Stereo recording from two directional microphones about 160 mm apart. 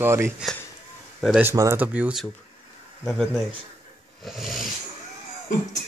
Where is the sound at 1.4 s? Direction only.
15° right (ahead or behind); by 4.6 s centre (ahead or behind).